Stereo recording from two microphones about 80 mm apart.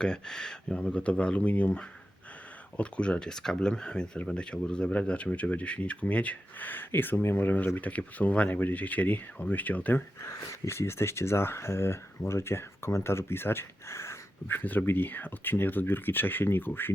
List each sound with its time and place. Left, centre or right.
0.0 s speech: centre
10.2 s speech: left